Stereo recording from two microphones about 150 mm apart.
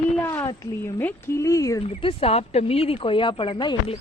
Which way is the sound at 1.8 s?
40° left (ahead or behind).